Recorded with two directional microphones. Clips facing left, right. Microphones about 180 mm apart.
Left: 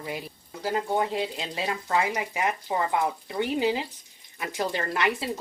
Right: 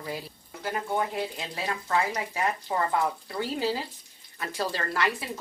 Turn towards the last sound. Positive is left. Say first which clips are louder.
# left 2 dB
turn(degrees=20)  # may be behind; listen again after turning